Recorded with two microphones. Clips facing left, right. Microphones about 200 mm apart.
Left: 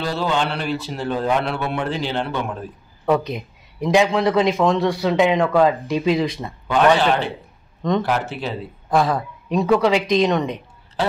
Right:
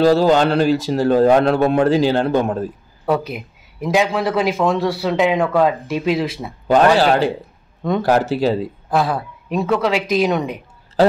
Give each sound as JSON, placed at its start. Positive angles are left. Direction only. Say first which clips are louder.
{"t": 0.0, "sound": "a man's voice", "louder": "right 9 dB", "side_deg": -40}
{"t": 3.1, "sound": "a man's voice", "louder": "even", "side_deg": -5}
{"t": 7.0, "sound": "a man's voice", "louder": "right 5 dB", "side_deg": -40}
{"t": 8.9, "sound": "a man's voice", "louder": "even", "side_deg": -5}